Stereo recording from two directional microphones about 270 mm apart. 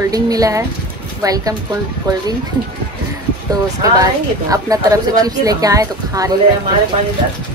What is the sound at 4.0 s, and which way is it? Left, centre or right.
Speech, centre.